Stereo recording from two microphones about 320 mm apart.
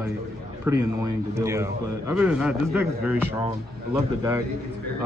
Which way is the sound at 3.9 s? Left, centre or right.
Centre.